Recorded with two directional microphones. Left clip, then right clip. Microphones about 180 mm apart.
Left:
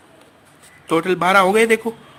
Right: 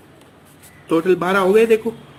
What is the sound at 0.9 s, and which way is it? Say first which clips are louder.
Speech: left 1 dB; 45° left (ahead or behind).